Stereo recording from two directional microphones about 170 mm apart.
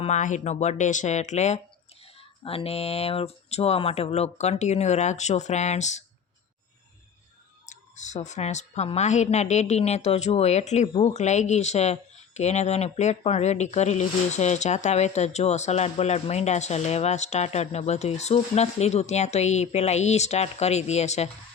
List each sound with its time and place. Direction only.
0.0 s speech: 45° left (ahead or behind)
2.4 s a woman's voice: 30° left (ahead or behind)
7.7 s a woman's voice: 45° left (ahead or behind)